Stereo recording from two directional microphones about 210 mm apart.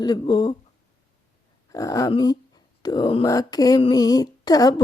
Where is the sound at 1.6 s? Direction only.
15° left (ahead or behind).